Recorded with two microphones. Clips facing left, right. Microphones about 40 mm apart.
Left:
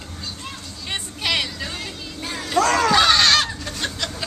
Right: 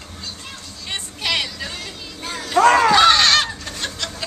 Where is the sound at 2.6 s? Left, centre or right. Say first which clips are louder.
Right 5 dB; right.